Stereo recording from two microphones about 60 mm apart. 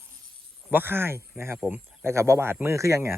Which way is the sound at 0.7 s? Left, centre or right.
Right.